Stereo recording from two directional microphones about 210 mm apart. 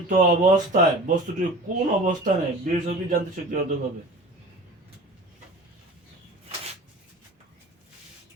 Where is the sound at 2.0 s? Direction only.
40° right (ahead or behind).